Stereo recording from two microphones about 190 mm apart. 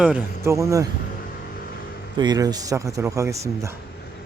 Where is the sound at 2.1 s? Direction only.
20° right (ahead or behind).